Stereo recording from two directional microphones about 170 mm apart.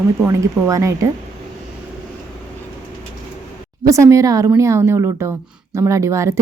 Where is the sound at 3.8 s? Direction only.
20° right (ahead or behind).